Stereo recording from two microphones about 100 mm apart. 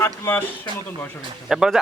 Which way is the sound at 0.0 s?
20° left (ahead or behind).